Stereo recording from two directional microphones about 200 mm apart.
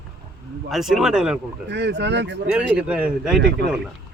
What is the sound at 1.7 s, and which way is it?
Speech, 60° right (ahead or behind).